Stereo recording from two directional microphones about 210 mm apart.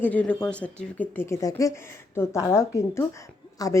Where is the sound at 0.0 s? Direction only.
5° left (ahead or behind).